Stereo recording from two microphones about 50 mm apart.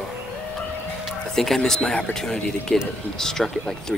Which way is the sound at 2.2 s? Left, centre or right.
Centre.